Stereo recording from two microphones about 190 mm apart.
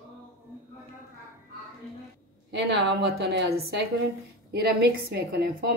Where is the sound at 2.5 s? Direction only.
65° right (ahead or behind).